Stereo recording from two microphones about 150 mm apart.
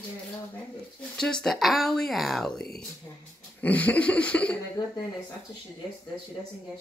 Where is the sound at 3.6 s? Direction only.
10° left (ahead or behind).